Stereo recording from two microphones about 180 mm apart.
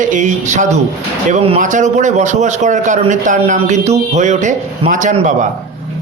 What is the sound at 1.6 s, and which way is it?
A man's voice, 45° right (ahead or behind).